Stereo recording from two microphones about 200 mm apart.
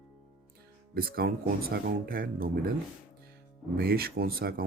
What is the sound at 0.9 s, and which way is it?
Speech, 50° right (ahead or behind).